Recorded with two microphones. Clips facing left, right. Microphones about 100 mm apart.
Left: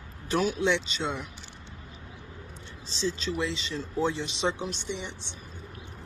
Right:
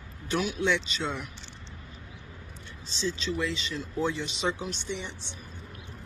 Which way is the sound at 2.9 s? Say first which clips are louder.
Left 1 dB; 35° left (ahead or behind).